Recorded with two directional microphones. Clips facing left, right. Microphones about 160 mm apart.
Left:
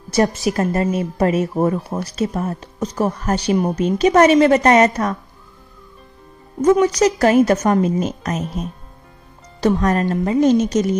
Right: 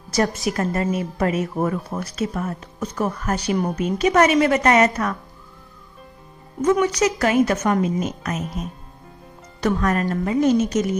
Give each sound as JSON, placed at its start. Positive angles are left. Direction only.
{"t": 0.5, "sound": "speech", "side_deg": 25}
{"t": 6.6, "sound": "speech", "side_deg": 40}
{"t": 9.6, "sound": "speech", "side_deg": 30}